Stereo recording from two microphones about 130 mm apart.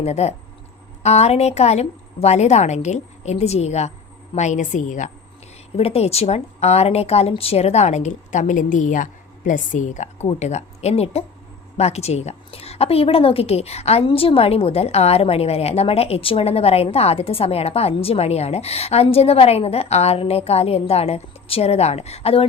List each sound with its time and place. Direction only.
0.0 s a woman's voice: 55° left (ahead or behind)
5.7 s a woman's voice: 50° left (ahead or behind)